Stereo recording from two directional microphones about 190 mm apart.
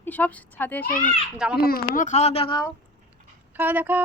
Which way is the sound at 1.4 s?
5° right (ahead or behind).